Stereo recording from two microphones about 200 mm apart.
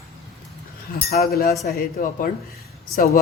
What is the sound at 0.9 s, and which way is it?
Speech, 50° left (ahead or behind).